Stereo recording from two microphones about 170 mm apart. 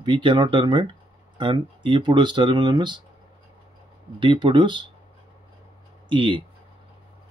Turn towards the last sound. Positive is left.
turn(degrees=-30)  # may be behind; listen again after turning